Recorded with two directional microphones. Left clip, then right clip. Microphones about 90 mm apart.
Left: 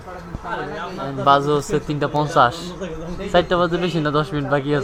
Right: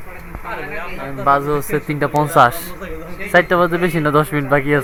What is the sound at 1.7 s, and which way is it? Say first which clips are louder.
Speech: right 3 dB; 10° right (ahead or behind).